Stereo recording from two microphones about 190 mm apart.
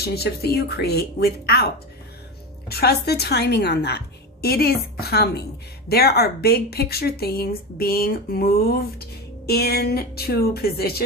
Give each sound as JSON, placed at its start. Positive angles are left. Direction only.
{"t": 0.0, "sound": "a woman's voice", "side_deg": 55}
{"t": 2.6, "sound": "a woman's voice", "side_deg": 55}